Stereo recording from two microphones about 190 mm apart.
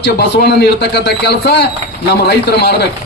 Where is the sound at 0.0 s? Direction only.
60° left (ahead or behind).